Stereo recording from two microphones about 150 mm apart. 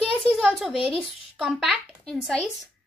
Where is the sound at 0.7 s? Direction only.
40° left (ahead or behind).